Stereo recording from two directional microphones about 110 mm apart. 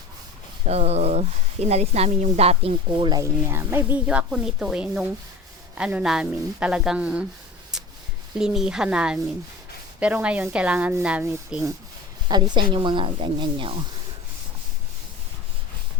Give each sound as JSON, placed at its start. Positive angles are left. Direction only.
{"t": 0.6, "sound": "speech", "side_deg": -70}
{"t": 3.5, "sound": "speech", "side_deg": -20}
{"t": 3.9, "sound": "speech", "side_deg": -10}
{"t": 8.4, "sound": "speech", "side_deg": -5}
{"t": 12.3, "sound": "speech", "side_deg": -45}